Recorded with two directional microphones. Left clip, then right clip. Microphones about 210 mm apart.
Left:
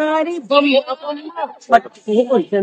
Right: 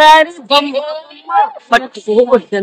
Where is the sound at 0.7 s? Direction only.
15° right (ahead or behind).